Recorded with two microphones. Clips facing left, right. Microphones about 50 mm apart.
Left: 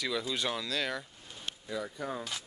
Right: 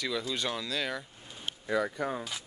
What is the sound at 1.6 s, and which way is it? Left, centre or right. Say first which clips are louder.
Speech: right 8 dB; right.